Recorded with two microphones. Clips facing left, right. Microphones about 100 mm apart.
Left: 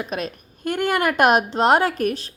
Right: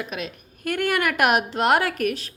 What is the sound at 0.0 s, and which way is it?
Speech, 40° left (ahead or behind).